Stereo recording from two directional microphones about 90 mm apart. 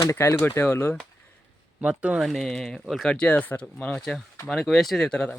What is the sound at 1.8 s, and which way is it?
Speech, 15° right (ahead or behind).